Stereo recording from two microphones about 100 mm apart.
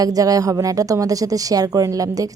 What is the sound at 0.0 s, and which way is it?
Speech, 40° right (ahead or behind).